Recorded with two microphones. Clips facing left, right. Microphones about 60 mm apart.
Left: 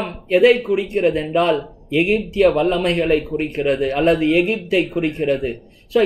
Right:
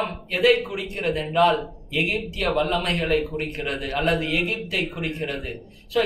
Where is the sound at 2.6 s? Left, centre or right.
Left.